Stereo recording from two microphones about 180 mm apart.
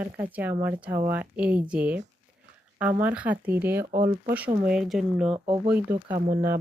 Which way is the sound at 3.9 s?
50° right (ahead or behind).